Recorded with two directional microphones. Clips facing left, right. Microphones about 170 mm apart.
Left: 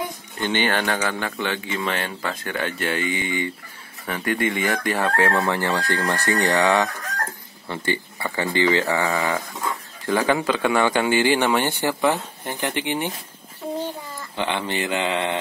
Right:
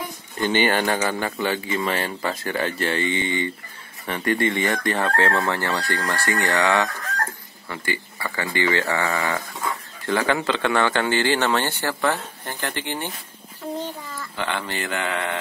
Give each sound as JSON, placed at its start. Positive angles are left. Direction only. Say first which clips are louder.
{"t": 0.4, "sound": "speech", "louder": "right 2 dB", "side_deg": -10}
{"t": 14.3, "sound": "speech", "louder": "left 3 dB", "side_deg": 20}